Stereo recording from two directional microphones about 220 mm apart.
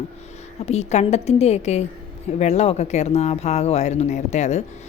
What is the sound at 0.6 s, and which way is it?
A woman's voice, 30° left (ahead or behind).